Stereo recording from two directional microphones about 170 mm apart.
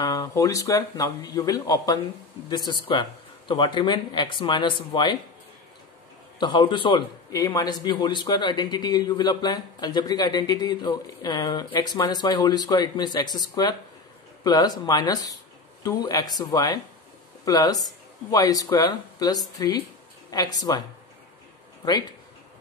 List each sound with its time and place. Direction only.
0.0 s a man's voice: 20° left (ahead or behind)
6.4 s a man's voice: 30° left (ahead or behind)